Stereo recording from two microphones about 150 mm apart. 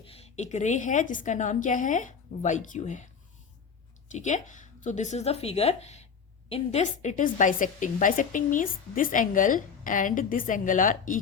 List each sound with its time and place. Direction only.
0.0 s a woman's voice: 40° left (ahead or behind)
4.1 s a woman's voice: 55° left (ahead or behind)